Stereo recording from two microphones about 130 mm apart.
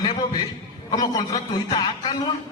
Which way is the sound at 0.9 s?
30° left (ahead or behind).